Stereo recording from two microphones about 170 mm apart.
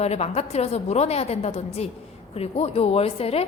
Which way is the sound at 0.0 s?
40° left (ahead or behind).